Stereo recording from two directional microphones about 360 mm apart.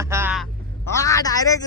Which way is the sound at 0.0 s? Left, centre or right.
Centre.